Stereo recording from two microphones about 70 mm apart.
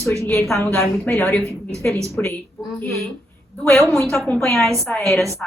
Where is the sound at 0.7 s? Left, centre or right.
Left.